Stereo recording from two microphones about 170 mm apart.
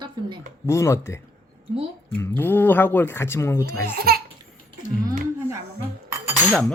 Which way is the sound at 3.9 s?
65° right (ahead or behind).